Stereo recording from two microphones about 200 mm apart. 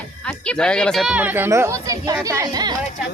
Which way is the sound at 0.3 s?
5° left (ahead or behind).